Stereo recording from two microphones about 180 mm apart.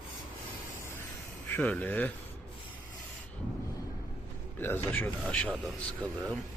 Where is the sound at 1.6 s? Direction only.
10° left (ahead or behind).